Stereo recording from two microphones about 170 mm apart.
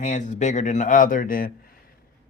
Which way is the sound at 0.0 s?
45° left (ahead or behind).